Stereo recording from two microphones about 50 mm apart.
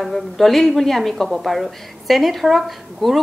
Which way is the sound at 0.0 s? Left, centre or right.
Centre.